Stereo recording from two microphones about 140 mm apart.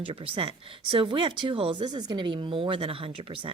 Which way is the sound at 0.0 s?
40° right (ahead or behind).